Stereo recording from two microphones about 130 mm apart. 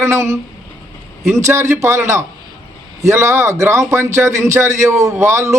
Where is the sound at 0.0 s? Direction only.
20° right (ahead or behind).